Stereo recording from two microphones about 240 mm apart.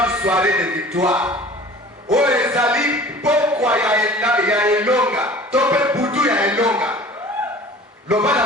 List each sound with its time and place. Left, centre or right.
0.0 s speech: centre
8.0 s a man's voice: centre